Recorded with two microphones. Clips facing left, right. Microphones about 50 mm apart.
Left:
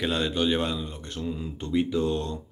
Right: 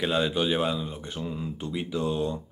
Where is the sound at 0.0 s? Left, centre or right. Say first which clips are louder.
Even; centre.